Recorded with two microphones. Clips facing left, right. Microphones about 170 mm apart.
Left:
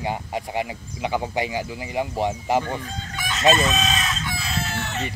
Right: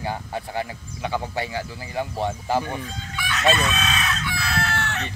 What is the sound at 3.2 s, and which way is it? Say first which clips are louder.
Chicken: even; 40° left (ahead or behind).